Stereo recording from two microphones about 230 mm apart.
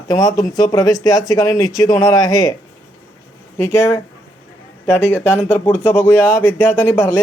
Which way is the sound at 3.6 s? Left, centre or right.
Centre.